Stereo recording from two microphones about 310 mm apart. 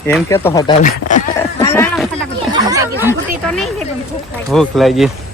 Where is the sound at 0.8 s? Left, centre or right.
Left.